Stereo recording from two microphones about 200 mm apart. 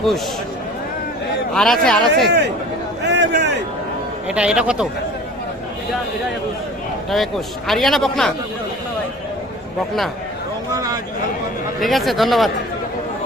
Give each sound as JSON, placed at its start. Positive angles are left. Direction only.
{"t": 1.5, "sound": "a man's voice", "side_deg": 0}
{"t": 3.0, "sound": "a sound", "side_deg": -55}
{"t": 4.3, "sound": "a man's voice", "side_deg": -5}
{"t": 7.1, "sound": "a man's voice", "side_deg": 0}
{"t": 10.8, "sound": "a sound", "side_deg": -20}
{"t": 11.8, "sound": "a man's voice", "side_deg": 0}